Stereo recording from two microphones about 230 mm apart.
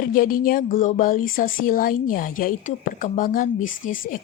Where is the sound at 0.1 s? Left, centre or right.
Left.